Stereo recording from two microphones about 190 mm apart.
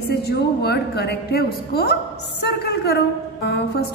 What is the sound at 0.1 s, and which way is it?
A woman's voice, 60° left (ahead or behind).